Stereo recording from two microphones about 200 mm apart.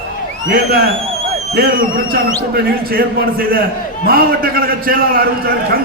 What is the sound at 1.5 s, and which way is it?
A man's voice, 45° right (ahead or behind).